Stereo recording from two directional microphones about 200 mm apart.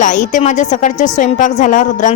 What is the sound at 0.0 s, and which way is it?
A woman's voice, 40° left (ahead or behind).